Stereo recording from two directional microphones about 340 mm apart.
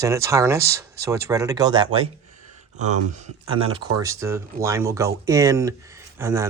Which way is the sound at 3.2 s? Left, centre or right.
Centre.